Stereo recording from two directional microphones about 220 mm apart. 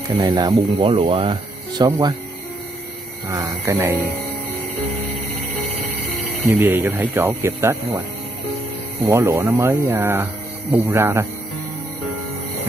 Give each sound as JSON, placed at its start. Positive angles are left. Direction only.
{"t": 0.1, "sound": "speech", "side_deg": -15}
{"t": 3.3, "sound": "speech", "side_deg": -15}
{"t": 6.4, "sound": "speech", "side_deg": -10}
{"t": 9.0, "sound": "speech", "side_deg": -15}